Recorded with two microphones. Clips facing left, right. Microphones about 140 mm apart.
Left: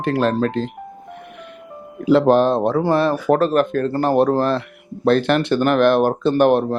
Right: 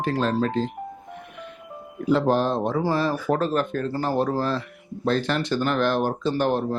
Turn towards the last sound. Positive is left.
turn(degrees=65)  # may be behind; listen again after turning